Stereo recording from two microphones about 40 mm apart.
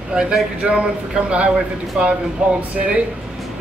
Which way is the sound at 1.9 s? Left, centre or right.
Centre.